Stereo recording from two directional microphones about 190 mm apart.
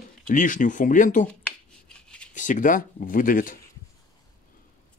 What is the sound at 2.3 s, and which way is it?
Speech, 40° left (ahead or behind).